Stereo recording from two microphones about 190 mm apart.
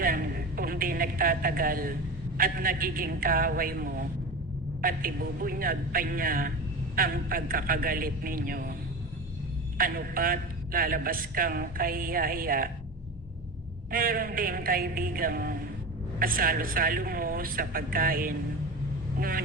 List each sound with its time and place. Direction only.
0.0 s a sound: 50° right (ahead or behind)
2.4 s a man's voice: 50° right (ahead or behind)
9.7 s a man's voice: 50° right (ahead or behind)
13.9 s a man's voice: 50° right (ahead or behind)